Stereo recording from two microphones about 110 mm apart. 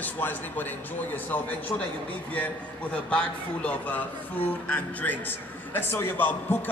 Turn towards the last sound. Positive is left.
turn(degrees=15)  # may be behind; listen again after turning